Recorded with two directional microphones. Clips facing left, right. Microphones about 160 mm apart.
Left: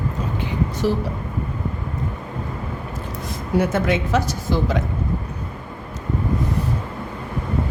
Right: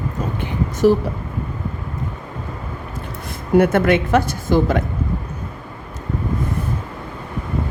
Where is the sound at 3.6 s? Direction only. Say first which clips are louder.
Right 5 dB; 60° right (ahead or behind).